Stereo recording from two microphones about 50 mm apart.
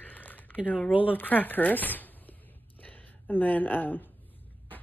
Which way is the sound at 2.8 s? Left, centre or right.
Left.